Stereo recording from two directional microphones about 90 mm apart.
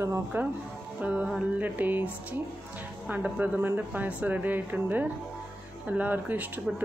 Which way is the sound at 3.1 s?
20° right (ahead or behind).